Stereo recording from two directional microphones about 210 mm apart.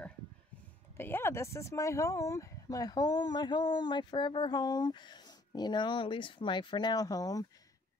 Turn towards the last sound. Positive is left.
turn(degrees=15)  # may be behind; listen again after turning